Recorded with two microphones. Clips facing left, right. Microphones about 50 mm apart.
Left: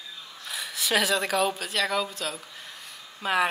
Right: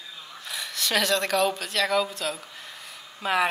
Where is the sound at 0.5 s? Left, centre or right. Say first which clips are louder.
Left 1 dB; centre.